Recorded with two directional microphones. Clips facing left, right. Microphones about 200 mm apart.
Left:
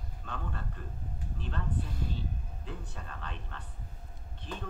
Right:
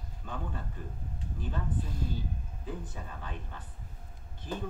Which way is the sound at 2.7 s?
10° right (ahead or behind).